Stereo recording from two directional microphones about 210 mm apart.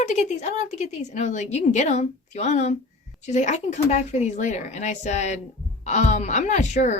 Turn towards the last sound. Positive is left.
turn(degrees=35)  # may be behind; listen again after turning